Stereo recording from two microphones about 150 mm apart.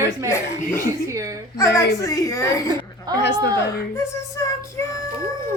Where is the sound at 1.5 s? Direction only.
20° left (ahead or behind).